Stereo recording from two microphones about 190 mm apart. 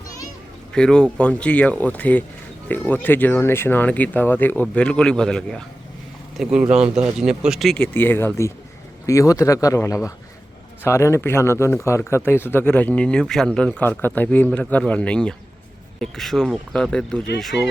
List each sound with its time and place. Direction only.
0.7 s speech: 5° left (ahead or behind)
6.7 s speech: 35° right (ahead or behind)
7.0 s speech: 5° right (ahead or behind)